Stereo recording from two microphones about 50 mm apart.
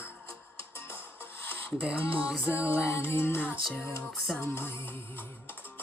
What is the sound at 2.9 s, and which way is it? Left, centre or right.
Music, left.